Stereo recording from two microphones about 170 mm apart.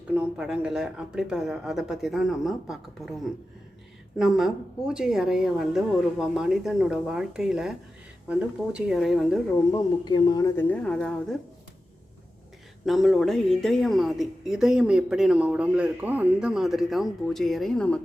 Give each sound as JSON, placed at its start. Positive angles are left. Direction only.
{"t": 0.1, "sound": "a woman's voice", "side_deg": -5}
{"t": 4.2, "sound": "a woman's voice", "side_deg": 0}
{"t": 9.7, "sound": "speech", "side_deg": 25}
{"t": 10.6, "sound": "a woman's voice", "side_deg": 5}
{"t": 12.8, "sound": "a woman's voice", "side_deg": 0}